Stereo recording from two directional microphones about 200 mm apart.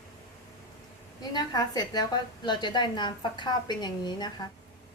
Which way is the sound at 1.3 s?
20° left (ahead or behind).